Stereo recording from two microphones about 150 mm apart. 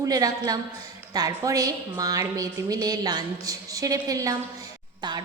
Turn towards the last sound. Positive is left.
turn(degrees=-30)  # may be behind; listen again after turning